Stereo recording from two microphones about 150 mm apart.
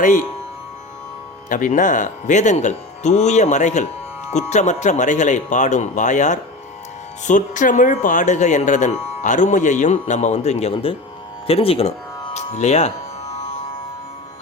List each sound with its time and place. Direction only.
0.0 s speech: 60° left (ahead or behind)
1.5 s speech: 60° left (ahead or behind); by 10.9 s 45° left (ahead or behind)
11.4 s music: 40° left (ahead or behind)